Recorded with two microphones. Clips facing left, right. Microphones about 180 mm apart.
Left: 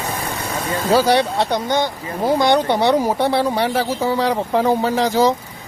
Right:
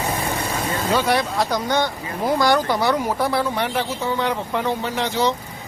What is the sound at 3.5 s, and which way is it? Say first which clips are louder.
Speech: left 4 dB; 35° left (ahead or behind).